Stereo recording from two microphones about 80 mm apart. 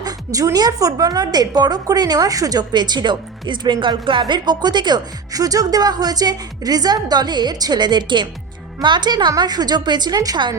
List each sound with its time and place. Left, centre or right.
0.0 s a woman's voice: right